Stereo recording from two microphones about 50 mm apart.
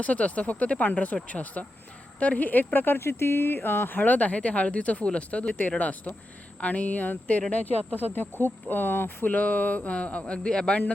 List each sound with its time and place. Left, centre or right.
0.0 s speech: left
7.9 s speech: left